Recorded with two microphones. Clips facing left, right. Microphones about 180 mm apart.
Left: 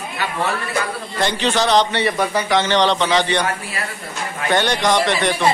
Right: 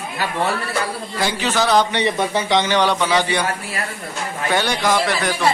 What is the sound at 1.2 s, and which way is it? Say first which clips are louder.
Speech: left 2 dB; 5° right (ahead or behind).